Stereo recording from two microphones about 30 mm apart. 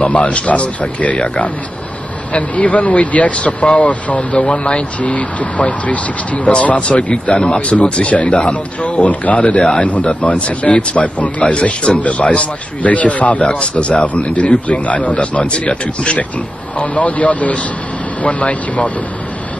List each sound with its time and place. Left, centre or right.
0.0 s speech: left
2.3 s speech: left
3.3 s speech: left
6.5 s speech: left
10.0 s speech: left
13.5 s speech: left
16.7 s speech: left